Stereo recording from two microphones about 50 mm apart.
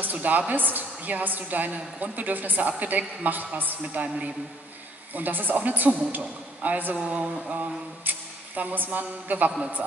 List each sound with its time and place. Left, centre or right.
0.0 s a woman's voice: right
8.0 s speech: right